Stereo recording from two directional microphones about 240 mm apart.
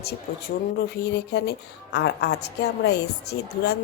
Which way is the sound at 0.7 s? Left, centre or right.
Left.